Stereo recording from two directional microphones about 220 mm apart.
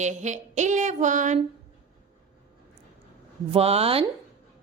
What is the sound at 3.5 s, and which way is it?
Speech, 30° right (ahead or behind).